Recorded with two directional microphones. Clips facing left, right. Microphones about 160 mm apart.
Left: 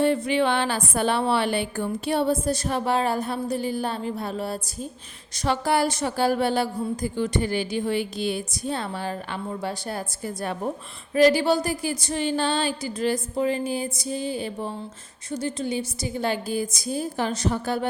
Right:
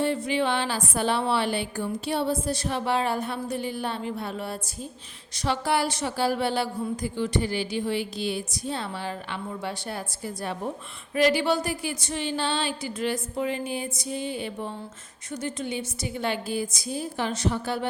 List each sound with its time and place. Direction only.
0.0 s a woman's voice: 60° left (ahead or behind)
11.1 s a woman's voice: 40° left (ahead or behind)